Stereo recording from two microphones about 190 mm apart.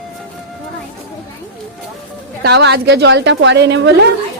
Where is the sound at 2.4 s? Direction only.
60° right (ahead or behind).